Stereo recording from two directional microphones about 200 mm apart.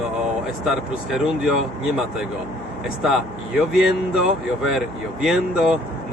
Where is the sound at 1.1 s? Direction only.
5° right (ahead or behind).